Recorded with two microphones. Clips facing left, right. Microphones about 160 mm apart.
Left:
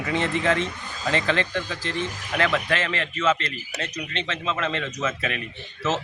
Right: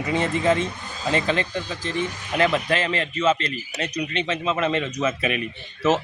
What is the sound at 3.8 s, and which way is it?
Speech, 15° right (ahead or behind).